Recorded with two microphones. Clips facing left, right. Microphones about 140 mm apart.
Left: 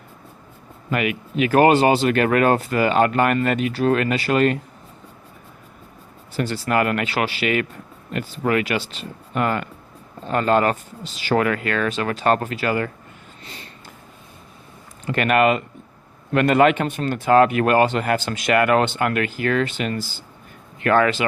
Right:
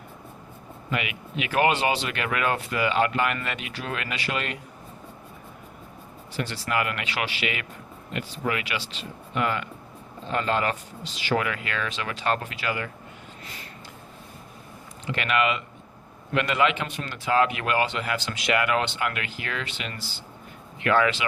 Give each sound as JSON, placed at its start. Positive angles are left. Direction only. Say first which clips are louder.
{"t": 0.9, "sound": "speech", "louder": "left 8 dB", "side_deg": 45}
{"t": 6.3, "sound": "speech", "louder": "left 7 dB", "side_deg": 45}
{"t": 13.4, "sound": "a sound", "louder": "left 4 dB", "side_deg": 30}
{"t": 15.0, "sound": "speech", "louder": "left 7 dB", "side_deg": 50}